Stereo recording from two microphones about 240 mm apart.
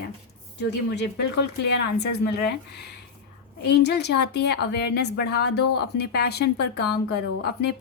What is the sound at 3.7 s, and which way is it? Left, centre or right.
A woman's voice, left.